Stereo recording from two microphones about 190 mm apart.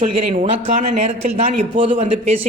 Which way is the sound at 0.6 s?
30° right (ahead or behind).